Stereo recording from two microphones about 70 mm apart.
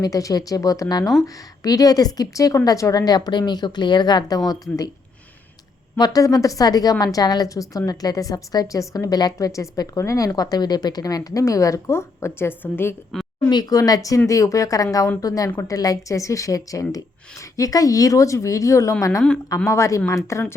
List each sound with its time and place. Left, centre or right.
0.0 s a woman's voice: left
4.4 s a woman's voice: left
6.0 s a woman's voice: left
9.5 s a woman's voice: left
13.5 s a woman's voice: left